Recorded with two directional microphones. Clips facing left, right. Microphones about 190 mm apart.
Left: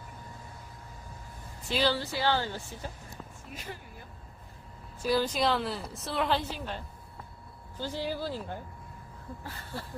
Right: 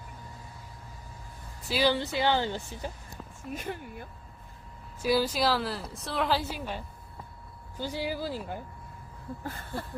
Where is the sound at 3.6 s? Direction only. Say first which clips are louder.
Right 4 dB; 55° right (ahead or behind).